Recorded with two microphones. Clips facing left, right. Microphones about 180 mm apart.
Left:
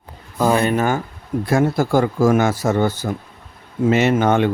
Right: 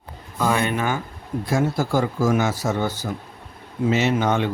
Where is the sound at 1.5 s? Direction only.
60° left (ahead or behind).